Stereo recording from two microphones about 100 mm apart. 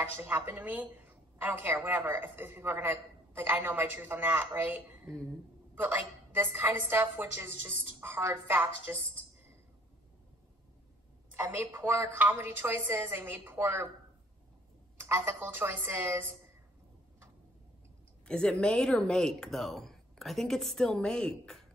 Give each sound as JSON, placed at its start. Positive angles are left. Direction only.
{"t": 0.0, "sound": "a woman's voice", "side_deg": -20}
{"t": 11.3, "sound": "a woman's voice", "side_deg": -20}
{"t": 15.0, "sound": "a woman's voice", "side_deg": -25}
{"t": 18.2, "sound": "speech", "side_deg": 10}